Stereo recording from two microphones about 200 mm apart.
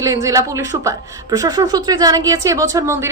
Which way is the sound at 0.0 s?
15° right (ahead or behind).